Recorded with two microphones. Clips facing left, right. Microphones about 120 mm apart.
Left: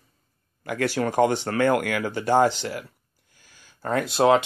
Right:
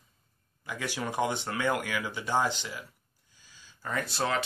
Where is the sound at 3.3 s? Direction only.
65° left (ahead or behind).